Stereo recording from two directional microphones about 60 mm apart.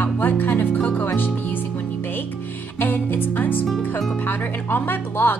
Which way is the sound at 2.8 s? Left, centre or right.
Left.